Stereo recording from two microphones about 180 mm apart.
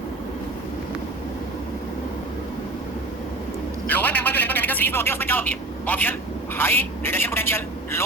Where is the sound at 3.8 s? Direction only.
10° left (ahead or behind).